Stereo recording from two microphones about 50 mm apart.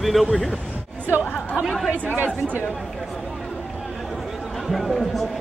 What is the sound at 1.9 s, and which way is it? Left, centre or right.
Speech, right.